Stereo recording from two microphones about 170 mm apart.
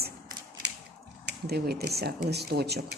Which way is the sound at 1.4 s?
65° right (ahead or behind).